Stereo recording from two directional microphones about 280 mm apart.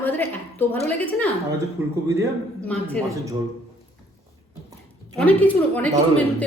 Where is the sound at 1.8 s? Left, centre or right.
Centre.